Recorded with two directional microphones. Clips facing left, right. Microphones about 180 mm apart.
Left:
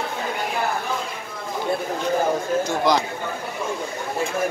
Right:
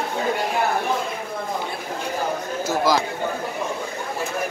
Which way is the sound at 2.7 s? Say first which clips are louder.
Right 3 dB; 5° right (ahead or behind).